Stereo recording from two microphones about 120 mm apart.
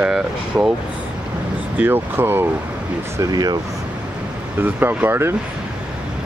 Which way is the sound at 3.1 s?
30° right (ahead or behind).